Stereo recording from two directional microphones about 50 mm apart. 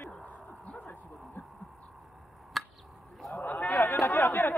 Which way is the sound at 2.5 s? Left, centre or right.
Centre.